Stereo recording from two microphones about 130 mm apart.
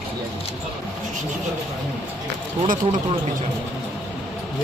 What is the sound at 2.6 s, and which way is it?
Speech, 90° right.